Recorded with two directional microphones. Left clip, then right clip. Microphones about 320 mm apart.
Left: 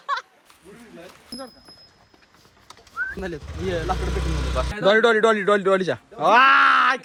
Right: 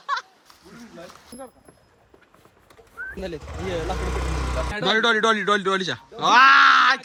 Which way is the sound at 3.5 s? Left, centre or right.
Centre.